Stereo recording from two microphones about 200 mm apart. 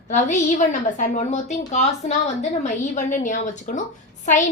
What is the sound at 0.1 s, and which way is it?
A woman's voice, 35° left (ahead or behind).